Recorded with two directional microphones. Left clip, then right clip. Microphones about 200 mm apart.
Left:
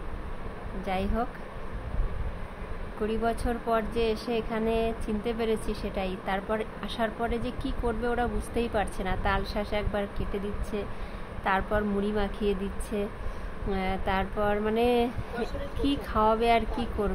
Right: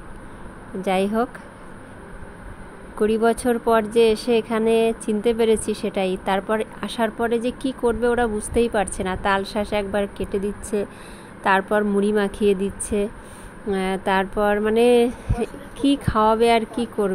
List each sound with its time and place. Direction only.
0.8 s a woman's voice: 35° right (ahead or behind)
3.0 s a woman's voice: 30° right (ahead or behind)